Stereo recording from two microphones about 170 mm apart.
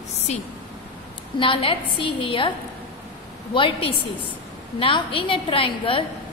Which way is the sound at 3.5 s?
30° left (ahead or behind).